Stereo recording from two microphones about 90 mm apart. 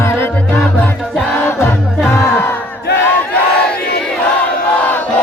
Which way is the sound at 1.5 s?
30° left (ahead or behind).